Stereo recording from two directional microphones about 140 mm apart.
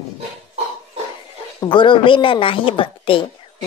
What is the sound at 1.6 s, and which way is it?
A woman's voice, 35° left (ahead or behind).